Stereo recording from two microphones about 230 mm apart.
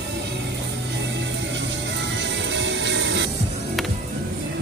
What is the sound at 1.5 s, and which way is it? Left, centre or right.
Music, right.